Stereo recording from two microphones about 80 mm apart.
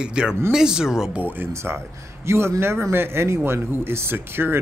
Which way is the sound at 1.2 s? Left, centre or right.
Right.